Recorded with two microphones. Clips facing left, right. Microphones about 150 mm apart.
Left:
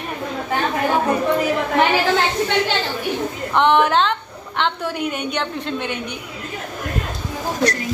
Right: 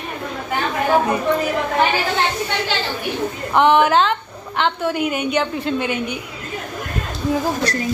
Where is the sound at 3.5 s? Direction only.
5° right (ahead or behind).